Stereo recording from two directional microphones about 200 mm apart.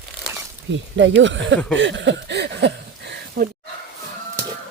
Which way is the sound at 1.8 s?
65° right (ahead or behind).